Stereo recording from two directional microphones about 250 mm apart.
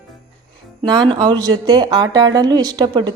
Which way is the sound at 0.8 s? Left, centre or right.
Centre.